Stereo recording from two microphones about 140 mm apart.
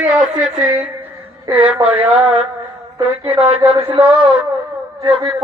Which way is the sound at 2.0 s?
40° right (ahead or behind).